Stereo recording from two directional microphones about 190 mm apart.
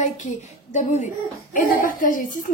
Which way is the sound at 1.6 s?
45° left (ahead or behind).